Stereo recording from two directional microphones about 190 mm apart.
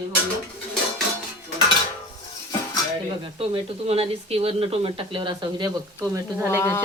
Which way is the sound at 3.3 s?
30° right (ahead or behind).